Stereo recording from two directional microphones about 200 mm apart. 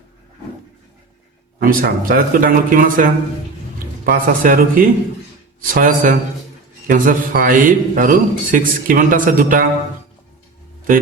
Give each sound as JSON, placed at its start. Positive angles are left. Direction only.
{"t": 1.5, "sound": "a man's voice", "side_deg": -45}